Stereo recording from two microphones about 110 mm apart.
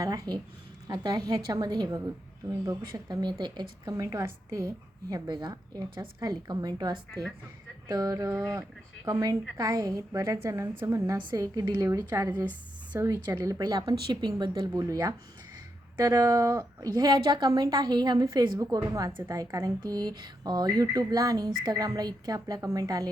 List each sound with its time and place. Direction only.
0.0 s speech: 35° right (ahead or behind)
7.1 s a woman's voice: centre (ahead or behind)
7.9 s a woman's voice: 35° right (ahead or behind)
13.2 s speech: 35° right (ahead or behind)
14.7 s a woman's voice: 30° right (ahead or behind)